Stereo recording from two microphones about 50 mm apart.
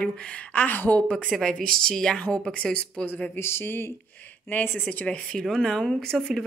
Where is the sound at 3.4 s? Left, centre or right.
Left.